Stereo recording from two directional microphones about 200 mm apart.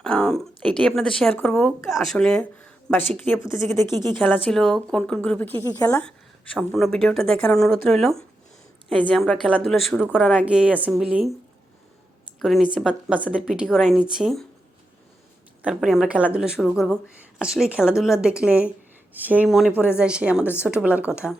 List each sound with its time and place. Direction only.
0.0 s a woman's voice: 5° left (ahead or behind)
6.0 s speech: 5° left (ahead or behind)
12.4 s speech: centre (ahead or behind)
15.6 s speech: centre (ahead or behind)